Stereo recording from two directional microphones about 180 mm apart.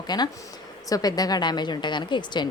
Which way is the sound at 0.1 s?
25° left (ahead or behind).